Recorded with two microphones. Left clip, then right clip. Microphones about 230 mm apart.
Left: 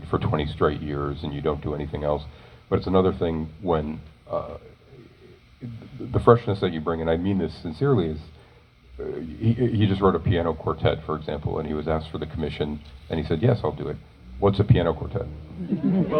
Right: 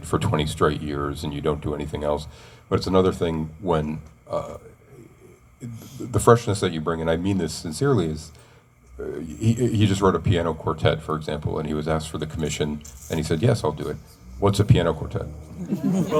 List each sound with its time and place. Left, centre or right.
0.0 s speech: right
6.1 s speech: right